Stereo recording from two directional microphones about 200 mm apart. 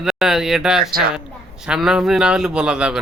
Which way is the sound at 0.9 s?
50° right (ahead or behind).